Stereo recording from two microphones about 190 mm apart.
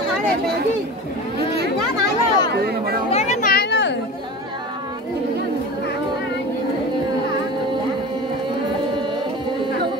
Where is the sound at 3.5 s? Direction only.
65° left (ahead or behind).